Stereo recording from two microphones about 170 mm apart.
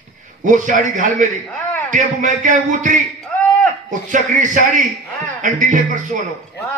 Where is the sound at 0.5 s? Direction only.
50° right (ahead or behind).